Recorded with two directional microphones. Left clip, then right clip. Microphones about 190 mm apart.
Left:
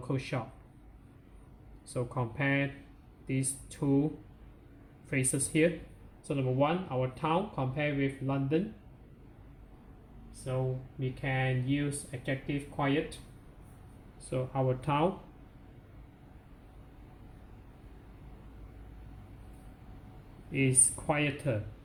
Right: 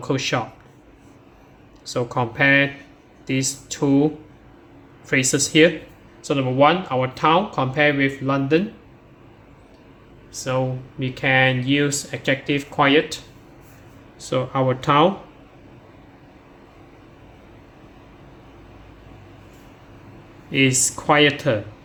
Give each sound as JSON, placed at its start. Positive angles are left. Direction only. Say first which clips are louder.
{"t": 0.0, "sound": "speech", "louder": "right 14 dB", "side_deg": -20}
{"t": 1.9, "sound": "speech", "louder": "right 13 dB", "side_deg": -20}
{"t": 11.0, "sound": "speech", "louder": "right 17 dB", "side_deg": -40}
{"t": 14.3, "sound": "speech", "louder": "right 12 dB", "side_deg": -30}
{"t": 20.6, "sound": "speech", "louder": "right 12 dB", "side_deg": -30}